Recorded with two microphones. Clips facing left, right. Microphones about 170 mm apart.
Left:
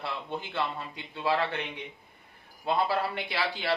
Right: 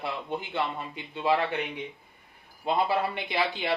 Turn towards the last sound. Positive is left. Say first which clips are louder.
# right 2 dB
turn(degrees=-20)  # may be behind; listen again after turning